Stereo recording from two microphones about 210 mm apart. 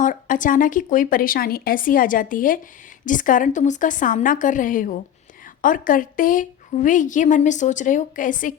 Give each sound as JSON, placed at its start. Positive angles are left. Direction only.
{"t": 0.0, "sound": "a woman's voice", "side_deg": 40}